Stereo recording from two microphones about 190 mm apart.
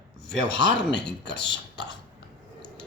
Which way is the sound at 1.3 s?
65° left (ahead or behind).